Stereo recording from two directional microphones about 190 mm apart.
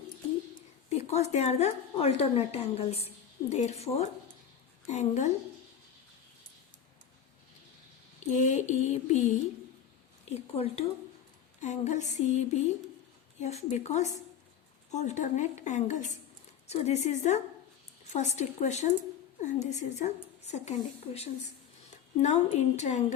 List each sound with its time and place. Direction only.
0.5 s a woman's voice: 35° left (ahead or behind)
8.3 s a woman's voice: 40° left (ahead or behind)
10.2 s a woman's voice: 35° left (ahead or behind)